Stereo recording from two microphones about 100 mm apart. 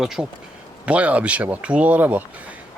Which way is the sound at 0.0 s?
5° right (ahead or behind).